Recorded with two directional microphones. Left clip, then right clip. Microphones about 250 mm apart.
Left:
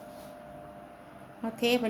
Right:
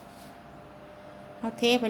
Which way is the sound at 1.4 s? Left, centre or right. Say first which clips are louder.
Right 3 dB; centre.